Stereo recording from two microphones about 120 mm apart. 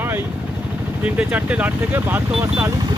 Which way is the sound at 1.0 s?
10° right (ahead or behind).